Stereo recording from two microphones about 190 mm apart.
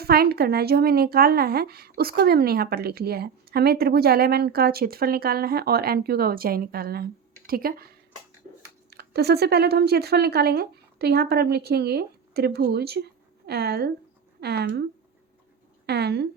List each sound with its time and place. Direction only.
0.0 s speech: 55° right (ahead or behind)
8.9 s speech: 60° right (ahead or behind)
15.9 s speech: 60° right (ahead or behind)